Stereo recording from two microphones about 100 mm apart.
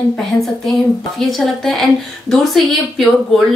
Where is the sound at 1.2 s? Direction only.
Centre (ahead or behind).